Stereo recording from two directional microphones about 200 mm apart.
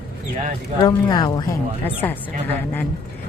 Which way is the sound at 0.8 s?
20° left (ahead or behind).